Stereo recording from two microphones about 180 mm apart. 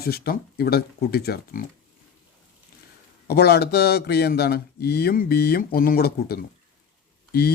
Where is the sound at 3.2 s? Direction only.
60° left (ahead or behind).